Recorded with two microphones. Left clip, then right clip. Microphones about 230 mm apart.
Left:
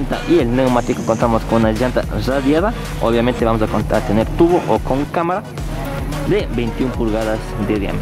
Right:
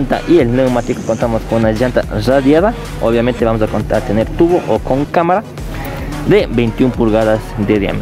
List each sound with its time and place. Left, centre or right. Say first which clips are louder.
0.1 s speech: right 4 dB; centre
5.1 s speech: right 6 dB; centre